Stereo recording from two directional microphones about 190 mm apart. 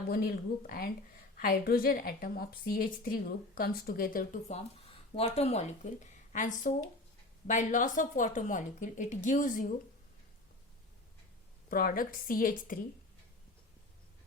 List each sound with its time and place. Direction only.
0.1 s a woman's voice: 50° left (ahead or behind)
11.7 s a woman's voice: 50° left (ahead or behind)